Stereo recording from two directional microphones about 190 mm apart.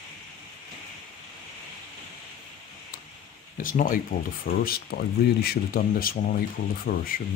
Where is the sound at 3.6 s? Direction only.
45° left (ahead or behind).